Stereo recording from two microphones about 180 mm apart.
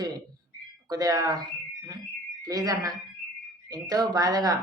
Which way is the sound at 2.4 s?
20° right (ahead or behind).